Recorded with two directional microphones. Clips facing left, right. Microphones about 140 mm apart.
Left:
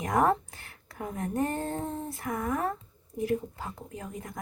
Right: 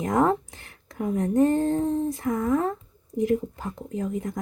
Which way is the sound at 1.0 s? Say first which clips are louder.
Right 9 dB; 20° right (ahead or behind).